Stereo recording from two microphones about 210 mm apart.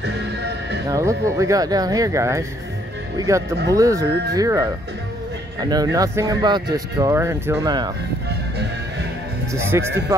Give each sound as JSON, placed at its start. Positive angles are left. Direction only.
{"t": 0.8, "sound": "speech", "side_deg": -15}
{"t": 9.5, "sound": "speech", "side_deg": -10}